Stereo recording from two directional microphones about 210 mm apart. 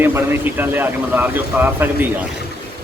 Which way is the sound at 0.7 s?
10° right (ahead or behind).